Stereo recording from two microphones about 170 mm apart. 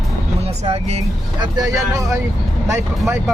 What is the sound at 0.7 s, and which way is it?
Speech, 40° right (ahead or behind).